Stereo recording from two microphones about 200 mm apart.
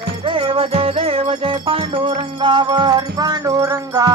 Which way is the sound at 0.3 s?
25° right (ahead or behind).